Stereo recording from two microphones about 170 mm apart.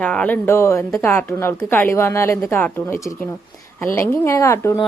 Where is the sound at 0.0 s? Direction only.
5° left (ahead or behind).